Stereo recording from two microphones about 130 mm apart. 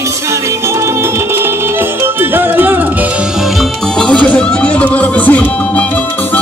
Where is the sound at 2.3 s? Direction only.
15° right (ahead or behind).